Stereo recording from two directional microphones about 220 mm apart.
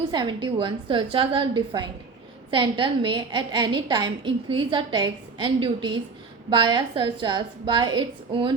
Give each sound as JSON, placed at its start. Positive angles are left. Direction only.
{"t": 0.1, "sound": "a woman's voice", "side_deg": -20}